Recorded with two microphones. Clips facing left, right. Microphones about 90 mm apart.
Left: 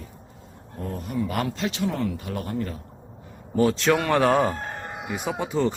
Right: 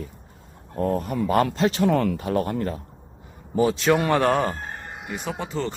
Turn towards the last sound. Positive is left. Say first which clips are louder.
# left 4 dB
turn(degrees=10)  # may be behind; listen again after turning